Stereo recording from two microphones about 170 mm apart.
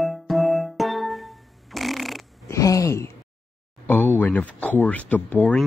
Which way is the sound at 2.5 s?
20° left (ahead or behind).